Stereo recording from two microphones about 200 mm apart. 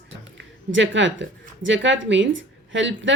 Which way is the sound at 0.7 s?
65° right (ahead or behind).